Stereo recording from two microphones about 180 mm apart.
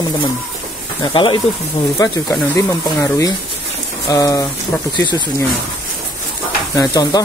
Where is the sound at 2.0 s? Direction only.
20° left (ahead or behind).